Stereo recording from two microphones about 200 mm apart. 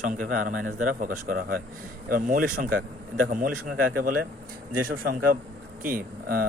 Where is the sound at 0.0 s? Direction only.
40° right (ahead or behind).